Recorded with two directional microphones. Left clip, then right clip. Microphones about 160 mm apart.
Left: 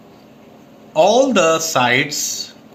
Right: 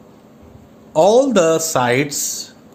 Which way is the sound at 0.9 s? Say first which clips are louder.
Right 1 dB; 80° right.